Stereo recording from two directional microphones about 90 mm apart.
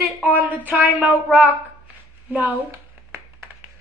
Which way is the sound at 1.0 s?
15° right (ahead or behind).